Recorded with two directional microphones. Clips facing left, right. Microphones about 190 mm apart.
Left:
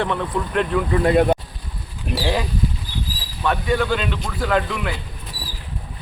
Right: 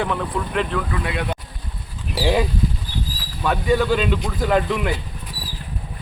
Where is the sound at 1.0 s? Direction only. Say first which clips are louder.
Left 10 dB; 45° left (ahead or behind).